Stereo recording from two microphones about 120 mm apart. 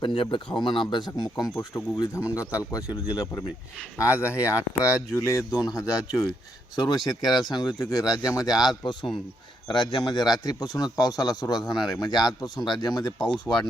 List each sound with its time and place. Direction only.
0.0 s speech: 40° left (ahead or behind)
11.6 s speech: centre (ahead or behind)
12.1 s speech: 35° left (ahead or behind)